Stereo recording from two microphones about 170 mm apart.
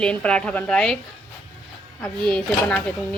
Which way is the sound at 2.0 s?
5° left (ahead or behind).